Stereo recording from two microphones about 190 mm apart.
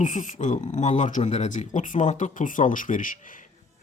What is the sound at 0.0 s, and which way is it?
Speech, 40° left (ahead or behind).